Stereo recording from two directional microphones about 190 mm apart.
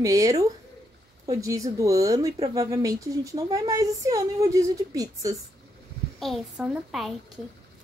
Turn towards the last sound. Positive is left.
turn(degrees=0)  # may be behind; listen again after turning